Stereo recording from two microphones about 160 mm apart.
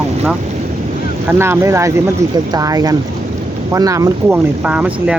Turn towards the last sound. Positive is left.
turn(degrees=-10)  # may be behind; listen again after turning